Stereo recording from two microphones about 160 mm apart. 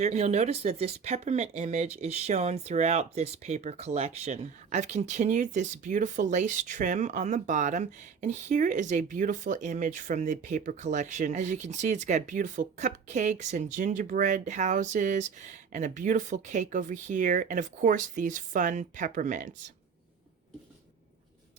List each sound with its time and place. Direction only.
0.0 s speech: 45° right (ahead or behind)